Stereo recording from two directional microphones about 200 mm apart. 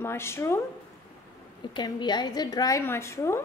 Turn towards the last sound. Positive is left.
turn(degrees=15)  # may be behind; listen again after turning